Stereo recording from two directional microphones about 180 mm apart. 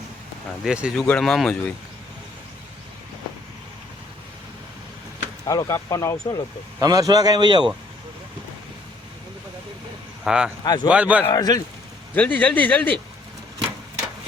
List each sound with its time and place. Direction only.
0.6 s speech: 5° right (ahead or behind)
5.5 s speech: 20° left (ahead or behind)
6.7 s a man's voice: 20° right (ahead or behind)
10.2 s speech: 5° right (ahead or behind)
10.6 s a man's voice: 25° left (ahead or behind)
10.8 s a man's voice: 5° right (ahead or behind)
11.3 s a man's voice: 20° left (ahead or behind)
12.1 s speech: 10° left (ahead or behind)